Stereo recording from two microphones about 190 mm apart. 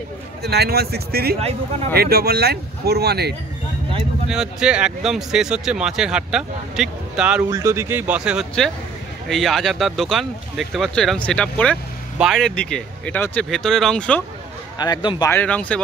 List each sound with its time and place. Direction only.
0.4 s speech: 60° right (ahead or behind)
4.3 s speech: 5° right (ahead or behind)
7.4 s speech: 15° right (ahead or behind); by 14.2 s 5° left (ahead or behind)
14.8 s speech: 20° left (ahead or behind)
15.3 s speech: 5° left (ahead or behind)